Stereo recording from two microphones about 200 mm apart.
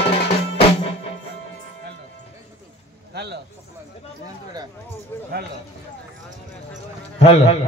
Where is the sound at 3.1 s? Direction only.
55° right (ahead or behind).